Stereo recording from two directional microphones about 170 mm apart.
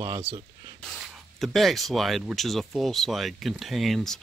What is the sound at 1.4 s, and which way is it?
Speech, centre (ahead or behind).